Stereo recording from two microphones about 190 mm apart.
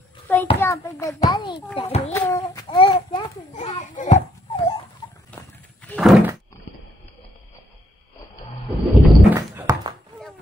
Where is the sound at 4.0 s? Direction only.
40° left (ahead or behind).